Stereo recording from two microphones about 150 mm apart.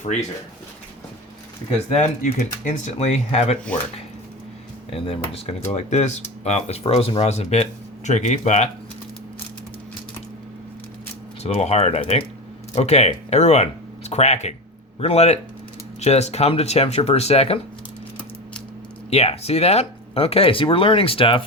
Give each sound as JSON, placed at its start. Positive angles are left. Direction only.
{"t": 0.1, "sound": "speech", "side_deg": 50}
{"t": 1.9, "sound": "speech", "side_deg": 50}
{"t": 4.9, "sound": "speech", "side_deg": 40}
{"t": 11.4, "sound": "speech", "side_deg": 45}
{"t": 19.1, "sound": "speech", "side_deg": 45}